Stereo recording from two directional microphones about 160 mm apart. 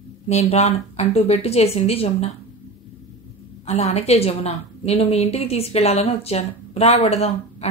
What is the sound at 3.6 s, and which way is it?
A woman's voice, 40° left (ahead or behind).